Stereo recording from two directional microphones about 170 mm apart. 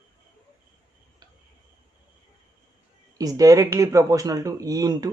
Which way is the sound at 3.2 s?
20° right (ahead or behind).